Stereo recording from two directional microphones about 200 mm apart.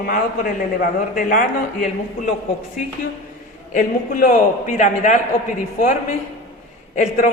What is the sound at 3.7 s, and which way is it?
A woman's voice, 40° left (ahead or behind).